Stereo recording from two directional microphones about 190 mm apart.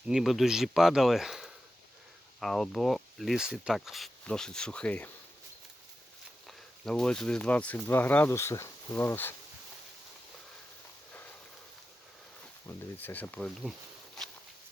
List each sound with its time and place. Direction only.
0.1 s speech: centre (ahead or behind)
6.5 s speech: 5° left (ahead or behind)
12.6 s speech: 10° left (ahead or behind)